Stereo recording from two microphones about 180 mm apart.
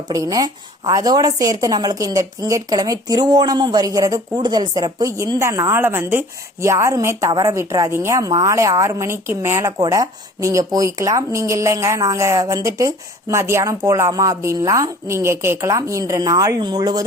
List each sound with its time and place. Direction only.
0.1 s a woman's voice: 20° right (ahead or behind)